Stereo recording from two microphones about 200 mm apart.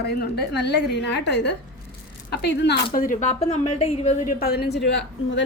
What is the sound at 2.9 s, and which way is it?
A woman's voice, 40° left (ahead or behind).